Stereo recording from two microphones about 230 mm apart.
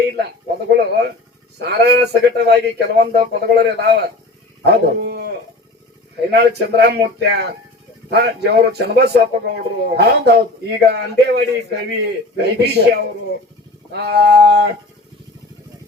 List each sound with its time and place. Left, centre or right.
0.2 s a man's voice: right
1.5 s a man's voice: right